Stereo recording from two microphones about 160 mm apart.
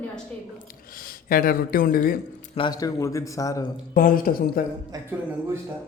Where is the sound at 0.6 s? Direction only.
65° left (ahead or behind).